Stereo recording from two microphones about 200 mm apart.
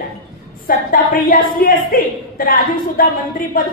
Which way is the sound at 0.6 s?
45° left (ahead or behind).